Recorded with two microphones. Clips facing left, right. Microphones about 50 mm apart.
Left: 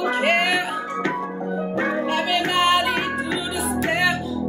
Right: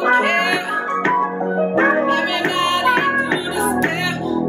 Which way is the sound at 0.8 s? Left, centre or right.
Right.